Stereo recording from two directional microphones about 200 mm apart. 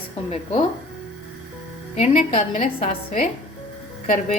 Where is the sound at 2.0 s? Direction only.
40° left (ahead or behind).